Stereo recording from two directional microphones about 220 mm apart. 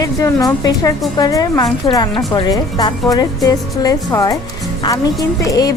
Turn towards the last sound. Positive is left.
turn(degrees=15)  # may be behind; listen again after turning